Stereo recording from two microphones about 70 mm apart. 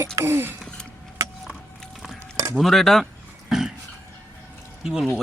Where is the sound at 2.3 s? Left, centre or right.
Right.